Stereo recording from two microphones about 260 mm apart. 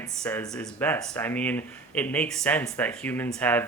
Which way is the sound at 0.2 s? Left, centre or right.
Centre.